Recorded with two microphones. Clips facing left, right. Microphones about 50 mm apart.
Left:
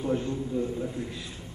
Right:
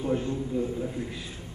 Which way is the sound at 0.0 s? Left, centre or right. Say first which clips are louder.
Even; centre.